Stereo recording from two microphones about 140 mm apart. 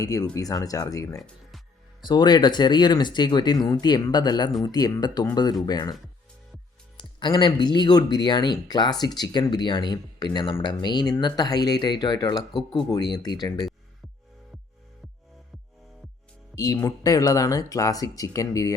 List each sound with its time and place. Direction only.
0.0 s speech: 25° left (ahead or behind)
16.6 s speech: 25° left (ahead or behind)